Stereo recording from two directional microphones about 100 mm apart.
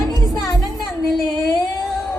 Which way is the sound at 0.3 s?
35° left (ahead or behind).